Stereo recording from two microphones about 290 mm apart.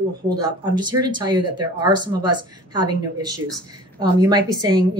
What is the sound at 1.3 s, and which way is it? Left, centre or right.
A woman's voice, centre.